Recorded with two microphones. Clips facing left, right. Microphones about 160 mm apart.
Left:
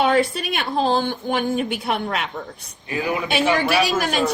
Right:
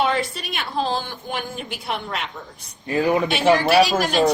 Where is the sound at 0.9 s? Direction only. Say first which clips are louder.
Left 6 dB; 55° left (ahead or behind).